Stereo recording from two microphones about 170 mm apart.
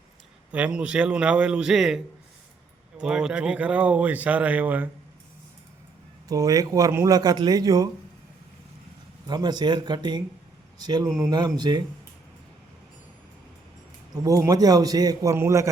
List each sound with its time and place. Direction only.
0.5 s a man's voice: 5° right (ahead or behind)
3.0 s speech: 5° right (ahead or behind)
6.2 s a man's voice: 20° right (ahead or behind)
9.2 s a man's voice: 25° right (ahead or behind)
14.1 s a man's voice: 20° right (ahead or behind)